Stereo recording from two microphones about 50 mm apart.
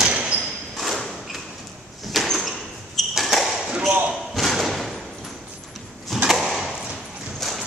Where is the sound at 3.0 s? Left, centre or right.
Centre.